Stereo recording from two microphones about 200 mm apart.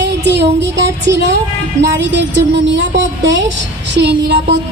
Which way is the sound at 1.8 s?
60° right (ahead or behind).